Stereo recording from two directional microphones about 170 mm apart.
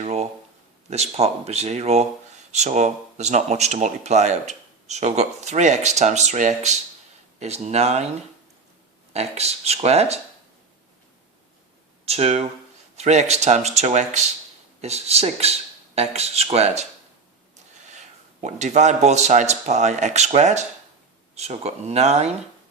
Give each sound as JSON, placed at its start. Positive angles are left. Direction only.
{"t": 0.0, "sound": "a sound", "side_deg": -40}
{"t": 0.9, "sound": "speech", "side_deg": -40}
{"t": 9.1, "sound": "speech", "side_deg": -40}
{"t": 12.0, "sound": "speech", "side_deg": -40}
{"t": 18.4, "sound": "speech", "side_deg": -40}